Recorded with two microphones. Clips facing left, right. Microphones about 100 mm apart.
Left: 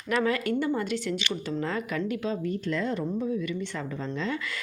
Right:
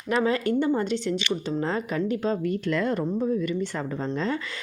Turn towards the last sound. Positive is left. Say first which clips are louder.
# right 4 dB
turn(degrees=-40)  # may be behind; listen again after turning